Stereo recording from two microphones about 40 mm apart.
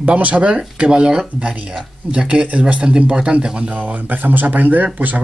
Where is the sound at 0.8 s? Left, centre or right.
Right.